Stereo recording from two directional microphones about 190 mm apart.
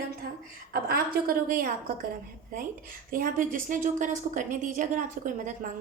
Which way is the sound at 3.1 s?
45° right (ahead or behind).